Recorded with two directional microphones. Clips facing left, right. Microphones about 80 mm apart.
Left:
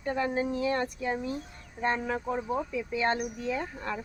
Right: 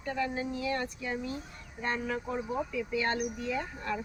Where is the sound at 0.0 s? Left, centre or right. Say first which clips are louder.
Left 4 dB; left.